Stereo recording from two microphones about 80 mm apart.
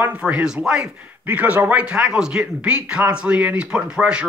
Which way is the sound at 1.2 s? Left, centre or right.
Centre.